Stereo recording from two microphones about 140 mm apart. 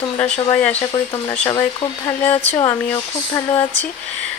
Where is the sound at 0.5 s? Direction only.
10° left (ahead or behind).